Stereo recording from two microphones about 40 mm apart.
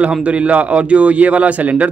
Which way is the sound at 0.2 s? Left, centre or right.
Right.